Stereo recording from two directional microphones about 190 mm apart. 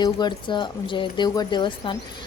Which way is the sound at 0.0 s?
25° left (ahead or behind).